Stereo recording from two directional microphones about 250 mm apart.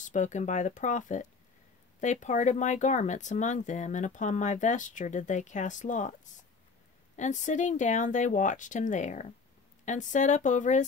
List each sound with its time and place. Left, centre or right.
0.0 s speech: left